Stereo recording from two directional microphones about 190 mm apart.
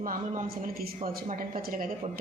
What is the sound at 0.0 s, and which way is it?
Speech, 45° right (ahead or behind).